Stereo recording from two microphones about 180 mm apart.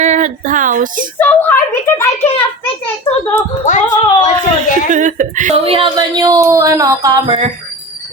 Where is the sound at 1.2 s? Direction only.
10° left (ahead or behind).